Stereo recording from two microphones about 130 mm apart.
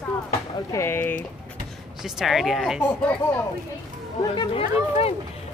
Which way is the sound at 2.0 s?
Centre (ahead or behind).